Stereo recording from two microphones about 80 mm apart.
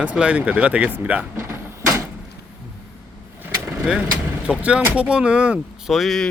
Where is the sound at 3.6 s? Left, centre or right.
Centre.